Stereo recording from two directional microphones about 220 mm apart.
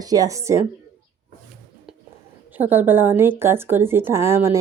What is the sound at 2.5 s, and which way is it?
Speech, 10° right (ahead or behind).